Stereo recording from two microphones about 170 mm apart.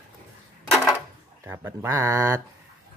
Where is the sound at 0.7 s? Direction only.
Centre (ahead or behind).